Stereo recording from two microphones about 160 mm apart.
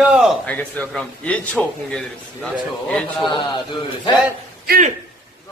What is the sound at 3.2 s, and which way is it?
Speech, 30° left (ahead or behind).